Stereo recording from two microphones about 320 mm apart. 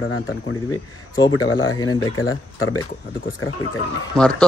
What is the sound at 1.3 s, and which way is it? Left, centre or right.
Speech, left.